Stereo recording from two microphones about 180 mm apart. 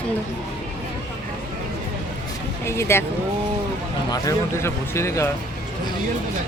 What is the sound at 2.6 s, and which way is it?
Speech, 15° left (ahead or behind).